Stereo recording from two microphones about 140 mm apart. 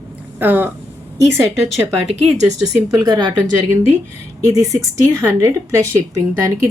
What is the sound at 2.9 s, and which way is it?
Speech, 30° right (ahead or behind).